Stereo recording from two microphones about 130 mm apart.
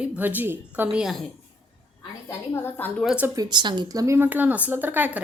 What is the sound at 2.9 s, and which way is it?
Speech, 5° left (ahead or behind).